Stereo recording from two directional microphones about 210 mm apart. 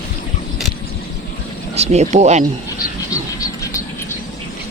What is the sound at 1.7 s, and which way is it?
Speech, 30° right (ahead or behind).